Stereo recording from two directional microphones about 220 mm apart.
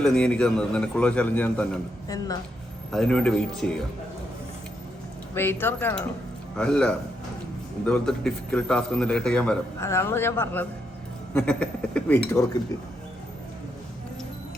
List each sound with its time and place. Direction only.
0.0 s a man's voice: 5° left (ahead or behind)
2.0 s speech: 15° left (ahead or behind)
2.9 s a man's voice: 5° left (ahead or behind)
5.3 s a man's voice: 10° left (ahead or behind)